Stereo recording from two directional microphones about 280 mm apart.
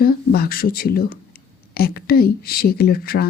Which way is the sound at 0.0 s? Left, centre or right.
Left.